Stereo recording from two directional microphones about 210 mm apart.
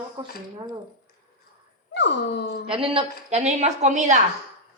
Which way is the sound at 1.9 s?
55° left (ahead or behind).